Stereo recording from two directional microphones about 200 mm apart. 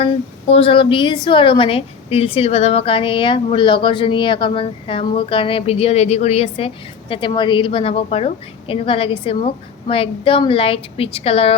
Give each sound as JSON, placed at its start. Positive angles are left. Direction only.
{"t": 0.0, "sound": "a woman's voice", "side_deg": 30}